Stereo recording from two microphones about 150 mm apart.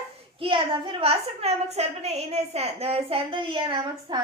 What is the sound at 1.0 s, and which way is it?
Speech, 45° right (ahead or behind).